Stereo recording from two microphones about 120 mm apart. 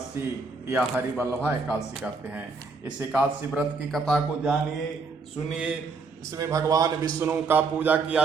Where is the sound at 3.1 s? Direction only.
10° right (ahead or behind).